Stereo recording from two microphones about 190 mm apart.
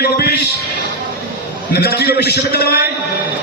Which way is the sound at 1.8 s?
55° left (ahead or behind).